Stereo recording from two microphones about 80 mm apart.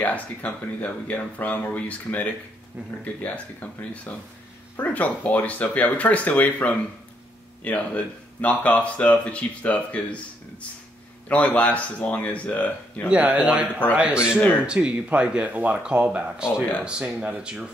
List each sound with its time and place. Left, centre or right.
0.0 s speech: centre
4.7 s speech: centre
11.2 s speech: centre
13.1 s speech: centre